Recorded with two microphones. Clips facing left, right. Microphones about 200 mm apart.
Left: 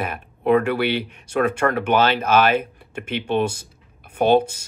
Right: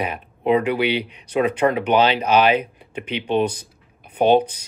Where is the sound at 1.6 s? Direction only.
15° right (ahead or behind).